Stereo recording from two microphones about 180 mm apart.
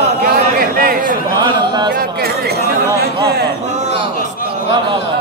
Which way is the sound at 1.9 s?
60° right (ahead or behind).